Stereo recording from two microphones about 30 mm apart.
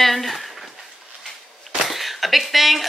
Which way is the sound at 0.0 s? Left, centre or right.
Centre.